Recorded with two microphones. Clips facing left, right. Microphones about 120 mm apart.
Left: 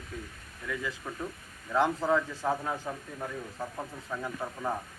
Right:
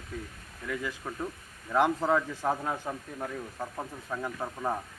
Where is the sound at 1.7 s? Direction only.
15° right (ahead or behind).